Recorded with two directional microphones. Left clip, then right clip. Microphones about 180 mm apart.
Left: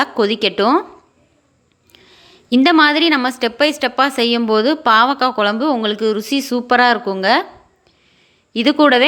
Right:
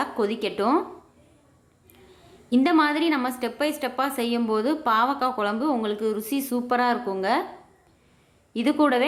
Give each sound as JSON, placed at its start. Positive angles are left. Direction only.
{"t": 0.0, "sound": "a woman's voice", "side_deg": 20}
{"t": 1.9, "sound": "a woman's voice", "side_deg": 25}
{"t": 8.5, "sound": "a woman's voice", "side_deg": 20}